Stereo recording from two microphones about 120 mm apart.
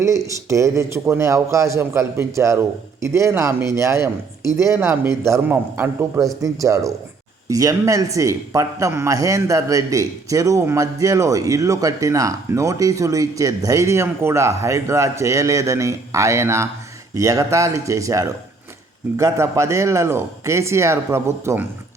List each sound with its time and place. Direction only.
0.0 s a man's voice: 25° right (ahead or behind)